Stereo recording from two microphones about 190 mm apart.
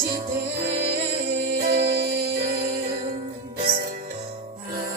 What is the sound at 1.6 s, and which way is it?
Music, 60° right (ahead or behind).